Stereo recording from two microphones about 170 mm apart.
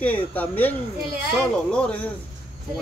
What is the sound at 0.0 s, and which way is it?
A woman's voice, 10° left (ahead or behind).